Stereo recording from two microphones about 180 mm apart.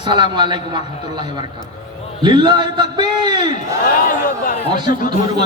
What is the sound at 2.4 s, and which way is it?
Speech, 25° right (ahead or behind).